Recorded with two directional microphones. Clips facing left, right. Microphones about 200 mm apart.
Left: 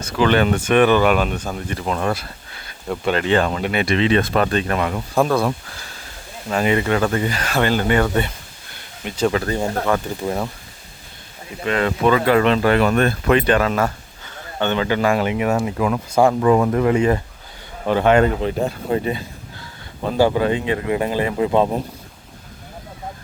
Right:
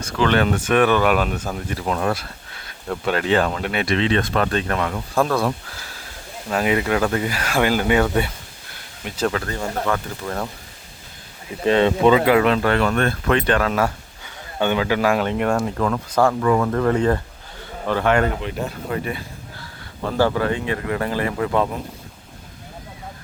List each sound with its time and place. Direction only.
0.0 s speech: 5° left (ahead or behind)
9.5 s speech: 20° left (ahead or behind)
11.6 s speech: 30° right (ahead or behind); by 12.5 s 10° right (ahead or behind)
12.6 s speech: 10° left (ahead or behind)